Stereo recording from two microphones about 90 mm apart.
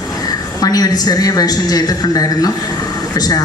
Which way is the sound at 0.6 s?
45° left (ahead or behind).